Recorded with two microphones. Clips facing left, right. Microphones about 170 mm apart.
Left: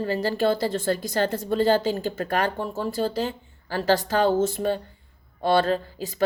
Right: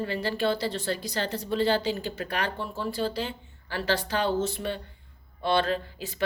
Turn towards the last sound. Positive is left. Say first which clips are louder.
# left 4 dB
turn(degrees=40)  # may be behind; listen again after turning